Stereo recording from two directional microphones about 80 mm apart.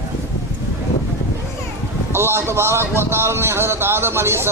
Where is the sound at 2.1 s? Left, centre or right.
Right.